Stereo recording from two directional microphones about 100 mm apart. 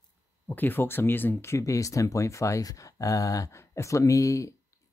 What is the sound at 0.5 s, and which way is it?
Speech, 20° left (ahead or behind).